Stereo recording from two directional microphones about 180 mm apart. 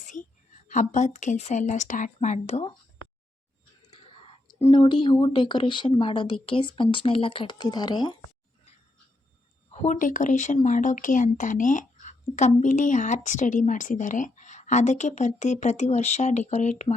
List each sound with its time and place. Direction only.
0.1 s a woman's voice: 45° left (ahead or behind)
3.9 s speech: 30° left (ahead or behind)
9.7 s speech: 40° left (ahead or behind)